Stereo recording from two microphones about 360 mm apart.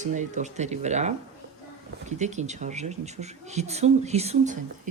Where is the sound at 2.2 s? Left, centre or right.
Centre.